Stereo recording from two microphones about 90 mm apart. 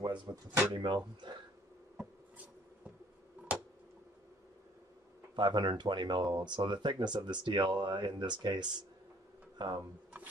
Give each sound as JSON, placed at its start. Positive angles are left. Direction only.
{"t": 0.0, "sound": "drawer open or close", "side_deg": -60}
{"t": 0.7, "sound": "speech", "side_deg": -60}
{"t": 2.0, "sound": "a sound", "side_deg": -15}
{"t": 5.3, "sound": "speech", "side_deg": -55}